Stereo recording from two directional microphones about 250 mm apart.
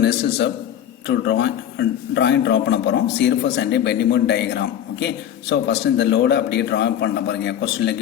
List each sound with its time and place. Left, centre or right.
0.0 s a man's voice: left